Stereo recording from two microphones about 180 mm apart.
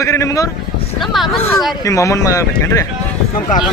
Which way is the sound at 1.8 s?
15° left (ahead or behind).